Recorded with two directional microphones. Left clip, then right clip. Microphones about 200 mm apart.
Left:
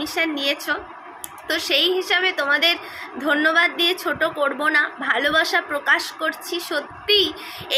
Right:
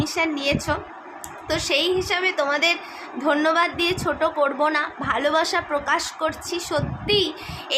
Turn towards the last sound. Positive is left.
turn(degrees=-10)  # may be behind; listen again after turning